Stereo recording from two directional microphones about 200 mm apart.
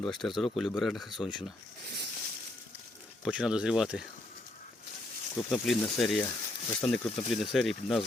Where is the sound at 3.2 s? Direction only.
5° right (ahead or behind).